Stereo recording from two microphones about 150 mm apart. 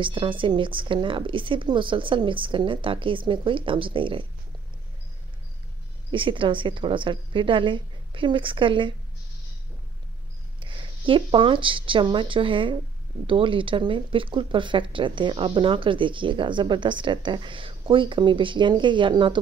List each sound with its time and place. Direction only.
0.0 s speech: 35° right (ahead or behind)
6.1 s speech: 35° right (ahead or behind)
10.6 s speech: 35° right (ahead or behind)